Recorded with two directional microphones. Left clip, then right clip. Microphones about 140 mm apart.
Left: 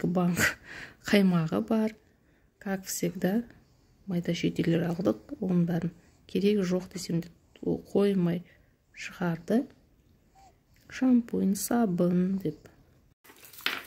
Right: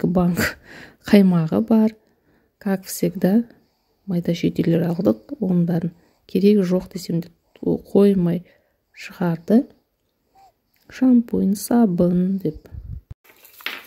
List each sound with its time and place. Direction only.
0.0 s speech: 50° right (ahead or behind)
10.9 s speech: 45° right (ahead or behind)